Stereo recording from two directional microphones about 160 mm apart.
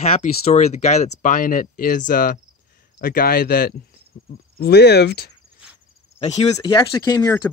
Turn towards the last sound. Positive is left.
turn(degrees=20)  # may be behind; listen again after turning